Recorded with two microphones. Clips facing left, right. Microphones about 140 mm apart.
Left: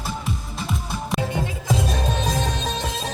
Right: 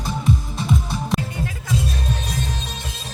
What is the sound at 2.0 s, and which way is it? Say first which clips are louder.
Music: left 3 dB; 90° left.